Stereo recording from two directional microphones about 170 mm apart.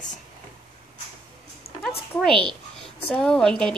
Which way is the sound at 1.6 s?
65° left (ahead or behind).